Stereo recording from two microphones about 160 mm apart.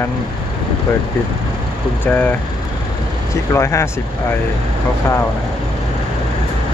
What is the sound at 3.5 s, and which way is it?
Speech, 15° left (ahead or behind).